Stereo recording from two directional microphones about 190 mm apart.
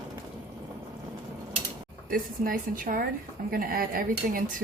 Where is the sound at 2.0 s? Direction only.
50° right (ahead or behind).